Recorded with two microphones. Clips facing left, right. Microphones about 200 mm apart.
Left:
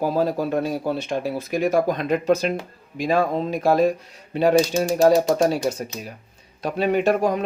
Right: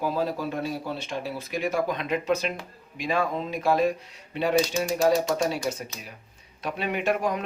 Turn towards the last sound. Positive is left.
turn(degrees=35)  # may be behind; listen again after turning